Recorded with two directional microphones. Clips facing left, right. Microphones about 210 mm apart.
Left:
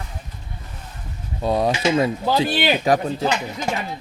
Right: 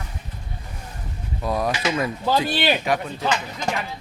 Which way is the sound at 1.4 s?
25° left (ahead or behind).